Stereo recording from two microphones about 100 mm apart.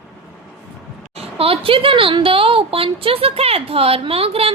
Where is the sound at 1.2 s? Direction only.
70° right (ahead or behind).